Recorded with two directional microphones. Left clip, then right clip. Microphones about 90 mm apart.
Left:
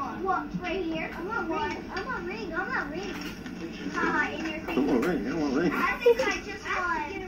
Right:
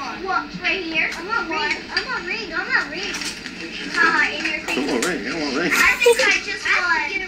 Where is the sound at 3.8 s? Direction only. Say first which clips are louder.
Right 10 dB; 30° right (ahead or behind).